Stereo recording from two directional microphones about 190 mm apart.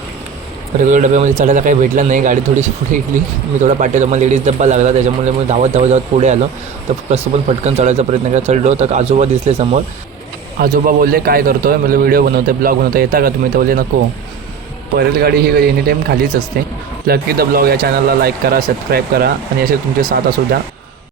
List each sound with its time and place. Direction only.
0.9 s speech: 40° right (ahead or behind)
10.6 s speech: 50° right (ahead or behind)
14.9 s a man's voice: 55° right (ahead or behind)